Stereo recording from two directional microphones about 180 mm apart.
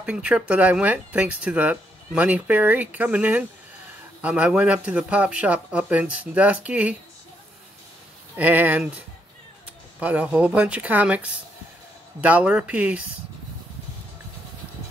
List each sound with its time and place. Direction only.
0.0 s speech: 5° right (ahead or behind)
8.4 s speech: 10° right (ahead or behind)